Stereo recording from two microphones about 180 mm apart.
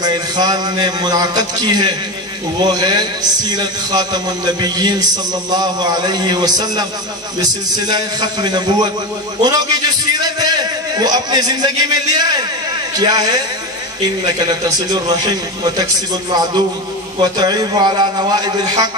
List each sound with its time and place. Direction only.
0.0 s speech: 20° right (ahead or behind)
14.4 s speech: 20° right (ahead or behind)